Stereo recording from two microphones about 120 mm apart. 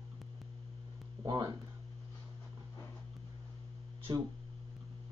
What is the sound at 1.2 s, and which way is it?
Speech, 30° right (ahead or behind).